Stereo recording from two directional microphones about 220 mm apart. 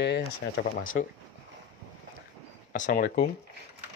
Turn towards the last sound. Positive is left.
turn(degrees=35)  # may be behind; listen again after turning